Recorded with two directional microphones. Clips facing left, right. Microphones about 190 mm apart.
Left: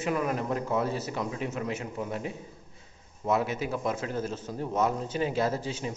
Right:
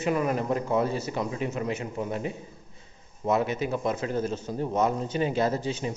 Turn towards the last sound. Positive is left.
turn(degrees=5)  # may be behind; listen again after turning